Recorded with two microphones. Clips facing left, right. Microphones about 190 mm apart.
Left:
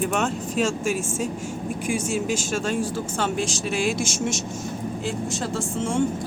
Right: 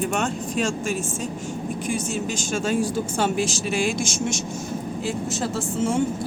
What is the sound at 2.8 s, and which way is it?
Speech, 10° right (ahead or behind).